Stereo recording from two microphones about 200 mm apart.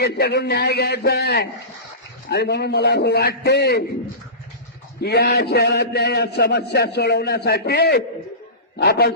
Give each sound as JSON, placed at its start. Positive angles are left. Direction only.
{"t": 0.0, "sound": "a man's voice", "side_deg": 55}
{"t": 4.9, "sound": "a man's voice", "side_deg": 55}